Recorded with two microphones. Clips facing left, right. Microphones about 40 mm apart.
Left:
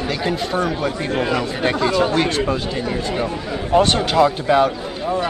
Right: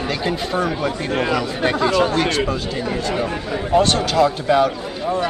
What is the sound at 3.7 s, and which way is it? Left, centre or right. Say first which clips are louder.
Speech: left 1 dB; left.